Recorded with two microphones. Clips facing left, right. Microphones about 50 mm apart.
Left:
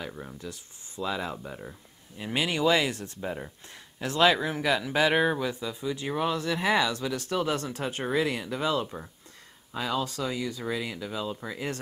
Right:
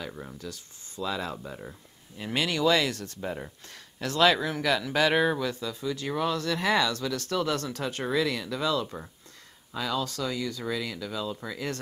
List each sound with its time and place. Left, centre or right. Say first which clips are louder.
0.1 s speech: even; centre
0.4 s speech: even; left
3.2 s speech: even; centre
4.0 s speech: even; centre
8.8 s speech: even; centre
9.8 s speech: even; left